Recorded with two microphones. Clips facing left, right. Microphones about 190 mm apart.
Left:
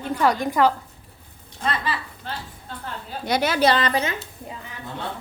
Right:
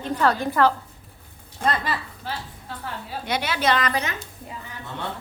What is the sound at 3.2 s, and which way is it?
Speech, 40° left (ahead or behind).